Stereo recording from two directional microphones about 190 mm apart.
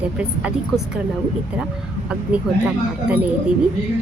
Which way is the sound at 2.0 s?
5° right (ahead or behind).